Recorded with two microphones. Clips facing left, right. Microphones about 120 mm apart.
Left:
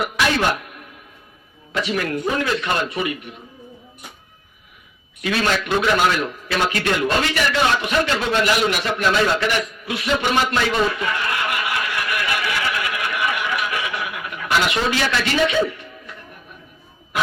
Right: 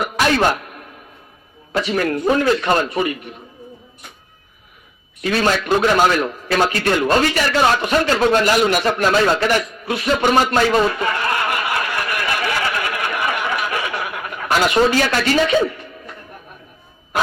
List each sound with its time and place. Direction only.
1.7 s a man's voice: 40° right (ahead or behind)
5.2 s a man's voice: 40° right (ahead or behind)